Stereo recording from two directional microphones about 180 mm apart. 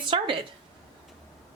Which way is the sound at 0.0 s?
25° right (ahead or behind).